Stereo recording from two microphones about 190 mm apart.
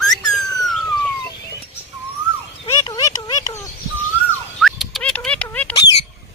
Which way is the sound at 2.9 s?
20° left (ahead or behind).